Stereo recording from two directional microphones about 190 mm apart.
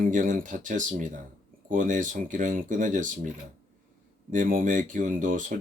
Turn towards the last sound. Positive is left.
turn(degrees=-45)  # may be behind; listen again after turning